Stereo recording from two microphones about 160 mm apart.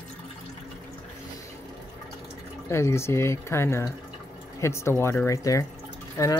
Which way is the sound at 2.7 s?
15° left (ahead or behind).